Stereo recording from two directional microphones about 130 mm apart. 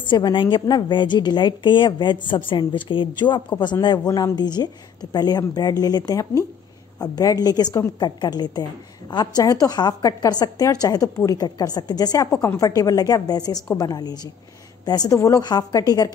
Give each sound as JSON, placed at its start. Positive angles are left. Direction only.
{"t": 0.0, "sound": "a woman's voice", "side_deg": 35}